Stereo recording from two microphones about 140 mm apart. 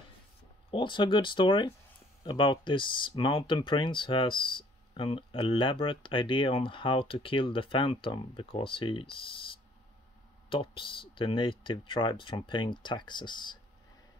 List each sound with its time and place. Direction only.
0.7 s speech: 35° left (ahead or behind)
10.5 s speech: 40° left (ahead or behind)